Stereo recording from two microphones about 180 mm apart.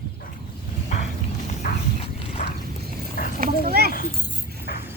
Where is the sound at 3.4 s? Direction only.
55° right (ahead or behind).